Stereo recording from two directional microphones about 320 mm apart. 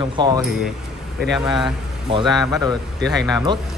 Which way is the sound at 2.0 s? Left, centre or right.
Centre.